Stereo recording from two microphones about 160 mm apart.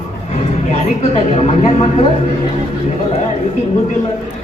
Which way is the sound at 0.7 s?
40° left (ahead or behind).